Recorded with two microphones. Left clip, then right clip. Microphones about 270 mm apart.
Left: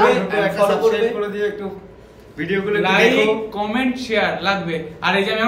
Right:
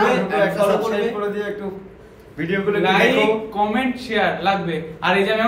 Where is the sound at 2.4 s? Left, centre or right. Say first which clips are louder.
Even; centre.